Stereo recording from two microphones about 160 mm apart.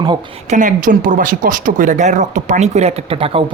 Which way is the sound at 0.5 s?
55° right (ahead or behind).